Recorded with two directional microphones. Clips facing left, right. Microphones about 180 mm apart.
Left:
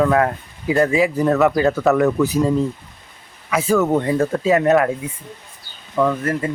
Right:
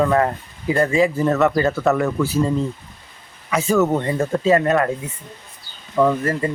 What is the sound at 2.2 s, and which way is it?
Speech, 15° left (ahead or behind).